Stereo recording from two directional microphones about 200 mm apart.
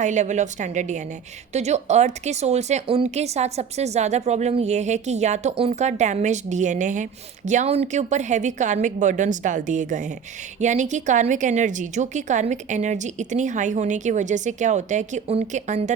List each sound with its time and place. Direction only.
0.0 s speech: 35° right (ahead or behind)